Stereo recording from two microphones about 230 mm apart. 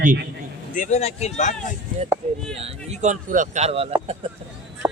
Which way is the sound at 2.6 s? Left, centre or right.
Right.